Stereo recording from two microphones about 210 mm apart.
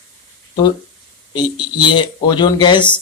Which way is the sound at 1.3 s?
20° left (ahead or behind).